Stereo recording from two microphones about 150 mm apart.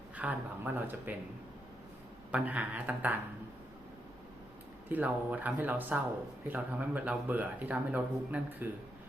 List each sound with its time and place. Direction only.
0.2 s speech: 10° right (ahead or behind)
2.3 s speech: 10° right (ahead or behind)
4.9 s speech: 10° right (ahead or behind)